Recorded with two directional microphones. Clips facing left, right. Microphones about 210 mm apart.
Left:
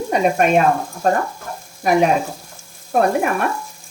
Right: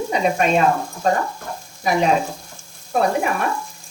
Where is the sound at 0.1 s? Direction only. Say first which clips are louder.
Left 4 dB; 50° left (ahead or behind).